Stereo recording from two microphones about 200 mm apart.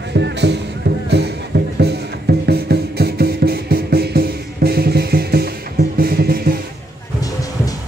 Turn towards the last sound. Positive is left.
turn(degrees=15)  # may be behind; listen again after turning